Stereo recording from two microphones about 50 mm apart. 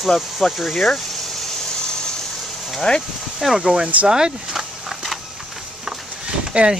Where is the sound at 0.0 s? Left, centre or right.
Centre.